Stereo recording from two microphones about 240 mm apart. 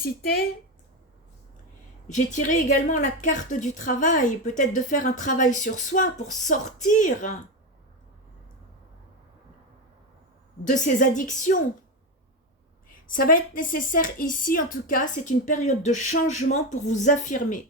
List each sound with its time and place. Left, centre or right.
2.0 s a woman's voice: left
10.6 s a woman's voice: left
12.9 s a woman's voice: left